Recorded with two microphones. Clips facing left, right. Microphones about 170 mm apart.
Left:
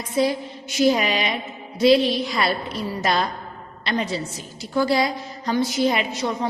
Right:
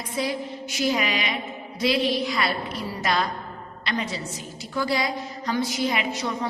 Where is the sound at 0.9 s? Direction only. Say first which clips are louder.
Left 4 dB; 30° left (ahead or behind).